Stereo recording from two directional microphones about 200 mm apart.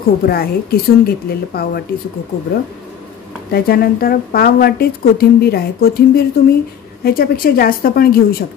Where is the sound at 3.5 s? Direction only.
50° left (ahead or behind).